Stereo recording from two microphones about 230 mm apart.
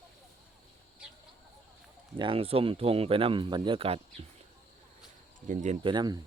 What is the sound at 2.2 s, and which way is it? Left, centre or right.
Speech, right.